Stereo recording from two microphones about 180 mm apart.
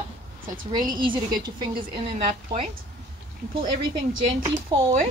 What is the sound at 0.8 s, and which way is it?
Speech, 25° right (ahead or behind).